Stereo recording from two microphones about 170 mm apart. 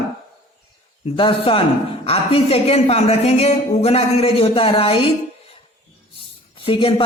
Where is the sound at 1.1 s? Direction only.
30° left (ahead or behind).